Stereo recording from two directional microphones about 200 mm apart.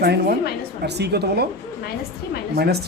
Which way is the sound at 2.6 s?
55° right (ahead or behind).